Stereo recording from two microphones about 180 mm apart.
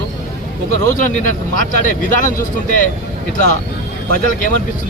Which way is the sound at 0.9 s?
45° left (ahead or behind).